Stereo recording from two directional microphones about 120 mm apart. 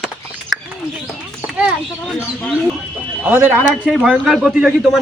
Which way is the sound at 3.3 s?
20° right (ahead or behind).